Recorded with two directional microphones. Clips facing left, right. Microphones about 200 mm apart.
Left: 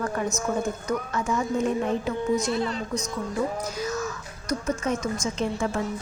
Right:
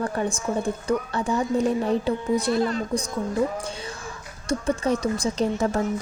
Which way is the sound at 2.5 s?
45° right (ahead or behind).